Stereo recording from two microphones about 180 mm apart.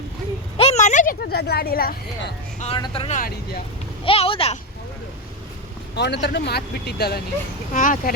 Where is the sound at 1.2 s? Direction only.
60° left (ahead or behind).